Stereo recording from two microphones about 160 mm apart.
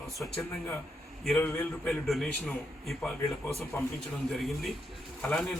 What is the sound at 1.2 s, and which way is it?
A man's voice, 10° left (ahead or behind).